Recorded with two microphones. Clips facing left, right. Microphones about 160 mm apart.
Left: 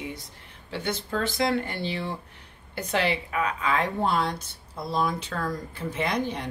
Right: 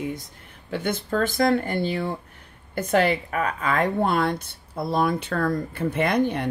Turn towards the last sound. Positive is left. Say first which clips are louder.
# right 6 dB
turn(degrees=-55)  # may be behind; listen again after turning